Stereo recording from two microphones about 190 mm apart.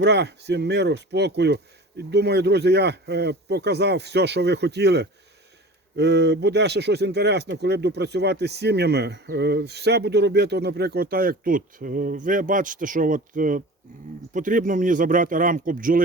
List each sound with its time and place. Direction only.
0.0 s speech: 60° right (ahead or behind); by 16.0 s 45° right (ahead or behind)